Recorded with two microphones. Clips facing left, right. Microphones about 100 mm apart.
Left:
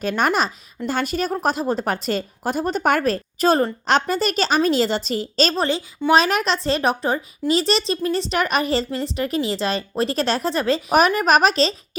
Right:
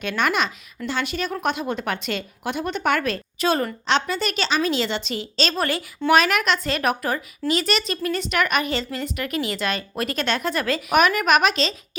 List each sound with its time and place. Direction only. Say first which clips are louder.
0.0 s speech: left 3 dB; 40° left (ahead or behind)
5.5 s speech: left 3 dB; 20° left (ahead or behind)